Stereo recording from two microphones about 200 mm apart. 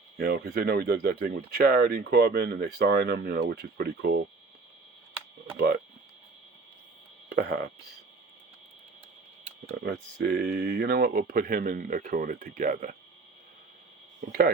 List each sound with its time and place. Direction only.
0.2 s speech: 50° right (ahead or behind)
5.5 s speech: 50° right (ahead or behind)
7.3 s speech: 50° right (ahead or behind)
9.8 s speech: 50° right (ahead or behind)